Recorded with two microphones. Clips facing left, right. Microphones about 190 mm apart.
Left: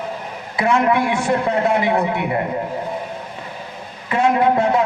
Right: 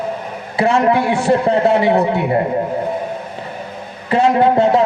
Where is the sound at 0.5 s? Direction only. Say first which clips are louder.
Right 3 dB; 30° right (ahead or behind).